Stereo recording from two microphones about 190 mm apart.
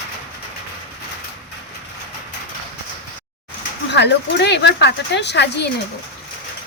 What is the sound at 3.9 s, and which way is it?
Speech, 65° left (ahead or behind).